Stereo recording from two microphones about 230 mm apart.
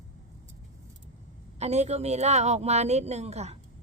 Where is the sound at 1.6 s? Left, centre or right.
Right.